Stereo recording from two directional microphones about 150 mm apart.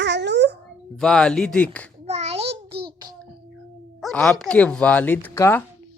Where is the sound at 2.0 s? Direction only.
45° right (ahead or behind).